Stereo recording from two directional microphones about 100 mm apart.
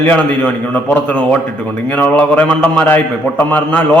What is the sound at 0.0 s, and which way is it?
A man's voice, 15° left (ahead or behind).